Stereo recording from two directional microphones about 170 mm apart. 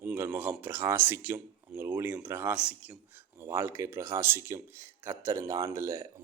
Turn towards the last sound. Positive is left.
turn(degrees=-15)  # may be behind; listen again after turning